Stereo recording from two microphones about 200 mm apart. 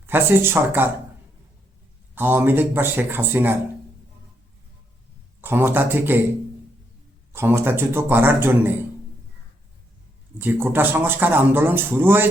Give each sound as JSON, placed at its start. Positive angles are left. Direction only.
{"t": 0.0, "sound": "speech", "side_deg": -10}
{"t": 2.1, "sound": "speech", "side_deg": -10}
{"t": 5.4, "sound": "speech", "side_deg": -10}
{"t": 7.3, "sound": "speech", "side_deg": -10}
{"t": 10.3, "sound": "speech", "side_deg": -10}